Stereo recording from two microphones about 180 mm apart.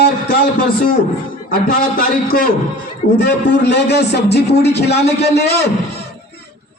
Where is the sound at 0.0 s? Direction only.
60° left (ahead or behind).